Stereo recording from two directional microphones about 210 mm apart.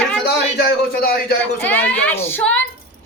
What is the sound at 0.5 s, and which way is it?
Speech, 45° left (ahead or behind).